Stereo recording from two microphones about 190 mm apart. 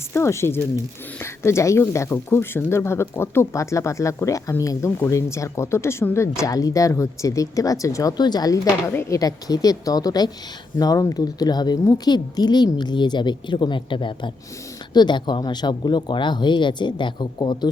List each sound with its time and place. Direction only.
0.1 s speech: 15° left (ahead or behind)